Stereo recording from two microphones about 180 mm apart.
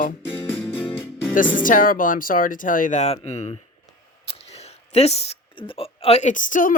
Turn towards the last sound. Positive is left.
turn(degrees=45)  # may be behind; listen again after turning